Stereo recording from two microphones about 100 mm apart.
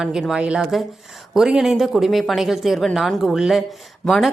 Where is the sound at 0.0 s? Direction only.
5° right (ahead or behind).